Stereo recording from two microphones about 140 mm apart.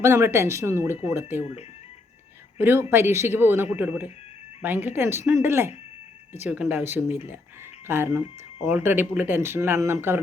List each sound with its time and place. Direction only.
0.0 s speech: 15° right (ahead or behind)
2.6 s speech: 15° right (ahead or behind)